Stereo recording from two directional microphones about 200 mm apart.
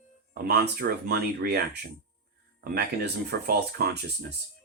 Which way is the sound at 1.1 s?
50° right (ahead or behind).